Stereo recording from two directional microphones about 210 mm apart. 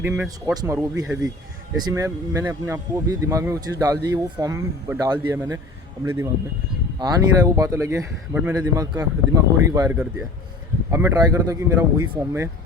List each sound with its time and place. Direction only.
0.0 s speech: 10° right (ahead or behind)
7.0 s speech: 15° right (ahead or behind)